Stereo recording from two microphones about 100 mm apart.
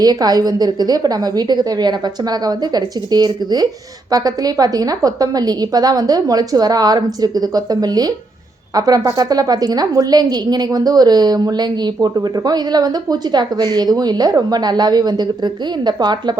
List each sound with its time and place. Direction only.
0.0 s a woman's voice: 40° right (ahead or behind)